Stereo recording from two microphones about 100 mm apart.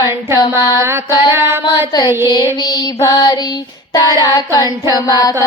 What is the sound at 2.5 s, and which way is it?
Female singing, 45° left (ahead or behind).